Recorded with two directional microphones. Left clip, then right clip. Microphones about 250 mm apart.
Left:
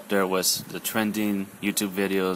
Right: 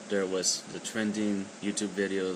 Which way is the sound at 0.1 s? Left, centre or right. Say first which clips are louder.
Left 6 dB; left.